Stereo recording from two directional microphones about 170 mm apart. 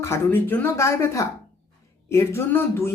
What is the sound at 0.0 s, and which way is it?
Speech, 15° left (ahead or behind).